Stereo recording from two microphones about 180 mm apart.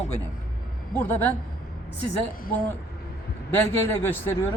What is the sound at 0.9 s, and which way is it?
Speech, 10° left (ahead or behind).